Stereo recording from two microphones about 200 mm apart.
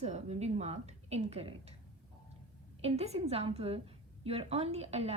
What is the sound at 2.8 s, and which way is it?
A woman's voice, 30° right (ahead or behind).